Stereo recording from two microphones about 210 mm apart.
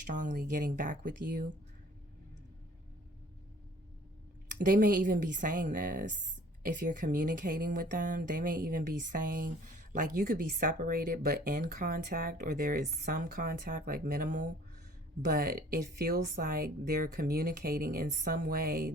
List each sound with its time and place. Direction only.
0.0 s speech: 40° right (ahead or behind)
4.5 s speech: 40° right (ahead or behind)